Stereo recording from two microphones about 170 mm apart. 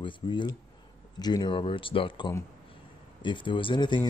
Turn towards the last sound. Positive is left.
turn(degrees=25)  # may be behind; listen again after turning